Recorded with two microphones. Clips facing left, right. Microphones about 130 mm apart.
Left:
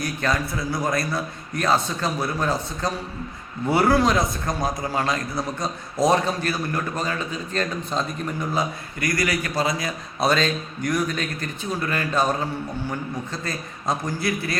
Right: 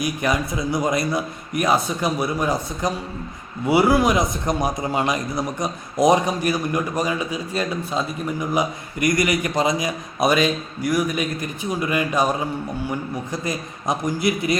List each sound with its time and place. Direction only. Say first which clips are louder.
0.0 s a man's voice: right 2 dB; 15° right (ahead or behind)